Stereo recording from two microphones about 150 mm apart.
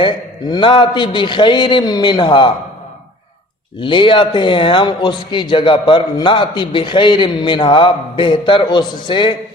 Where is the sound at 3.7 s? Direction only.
35° left (ahead or behind).